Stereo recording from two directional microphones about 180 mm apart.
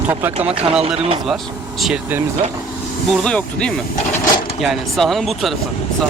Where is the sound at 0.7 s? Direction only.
35° right (ahead or behind).